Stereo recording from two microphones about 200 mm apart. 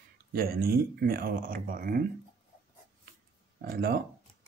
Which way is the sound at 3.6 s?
50° right (ahead or behind).